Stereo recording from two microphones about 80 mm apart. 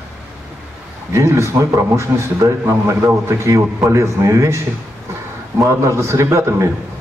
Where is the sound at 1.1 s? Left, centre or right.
Right.